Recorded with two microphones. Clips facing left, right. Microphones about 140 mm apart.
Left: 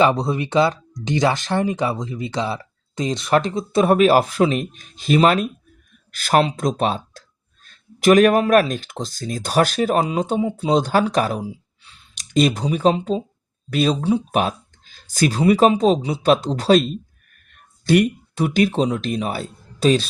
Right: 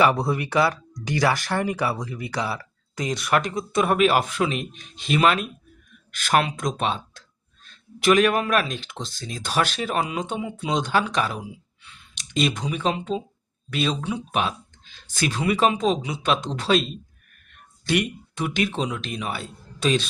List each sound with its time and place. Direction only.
0.0 s speech: 20° left (ahead or behind); by 20.1 s 40° left (ahead or behind)